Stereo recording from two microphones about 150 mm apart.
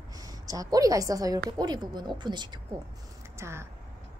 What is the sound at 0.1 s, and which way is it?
A woman's voice, 25° right (ahead or behind).